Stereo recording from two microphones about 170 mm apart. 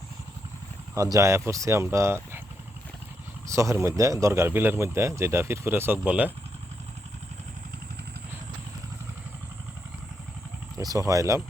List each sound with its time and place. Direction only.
0.9 s speech: 20° right (ahead or behind)
3.4 s speech: 15° right (ahead or behind)
10.8 s speech: 20° right (ahead or behind)